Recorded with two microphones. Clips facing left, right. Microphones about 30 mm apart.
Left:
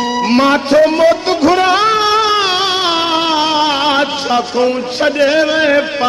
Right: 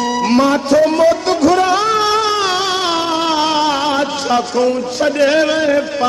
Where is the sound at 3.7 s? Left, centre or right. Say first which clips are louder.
Left 3 dB; left.